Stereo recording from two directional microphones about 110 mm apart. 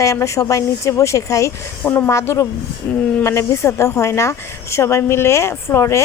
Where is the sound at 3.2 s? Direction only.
25° left (ahead or behind).